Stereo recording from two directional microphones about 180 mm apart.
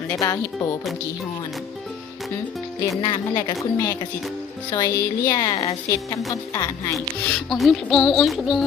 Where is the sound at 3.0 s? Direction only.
25° left (ahead or behind).